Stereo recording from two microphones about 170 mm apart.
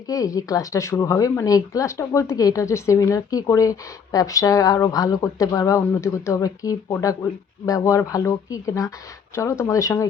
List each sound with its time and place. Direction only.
0.1 s speech: 20° left (ahead or behind)